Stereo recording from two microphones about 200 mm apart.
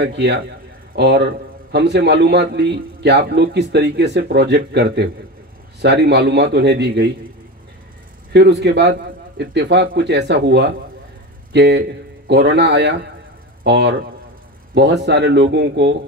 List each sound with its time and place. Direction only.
0.0 s a man's voice: 60° right (ahead or behind)
8.3 s a man's voice: 60° right (ahead or behind)